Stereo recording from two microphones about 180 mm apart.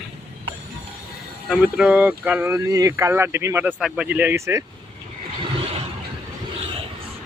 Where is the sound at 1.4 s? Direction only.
5° right (ahead or behind).